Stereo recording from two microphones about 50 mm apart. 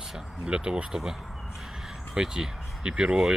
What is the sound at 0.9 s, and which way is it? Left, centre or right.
Speech, centre.